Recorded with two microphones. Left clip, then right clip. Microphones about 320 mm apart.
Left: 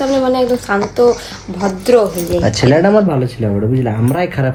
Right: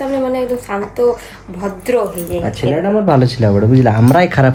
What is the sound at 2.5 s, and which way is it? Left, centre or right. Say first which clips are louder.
Speech: left 5 dB; left.